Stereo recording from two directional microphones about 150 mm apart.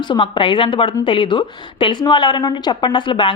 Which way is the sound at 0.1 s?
35° left (ahead or behind).